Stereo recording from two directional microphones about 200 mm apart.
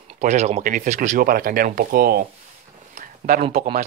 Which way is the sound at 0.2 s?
35° right (ahead or behind).